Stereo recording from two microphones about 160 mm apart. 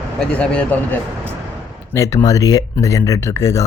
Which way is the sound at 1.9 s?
20° left (ahead or behind).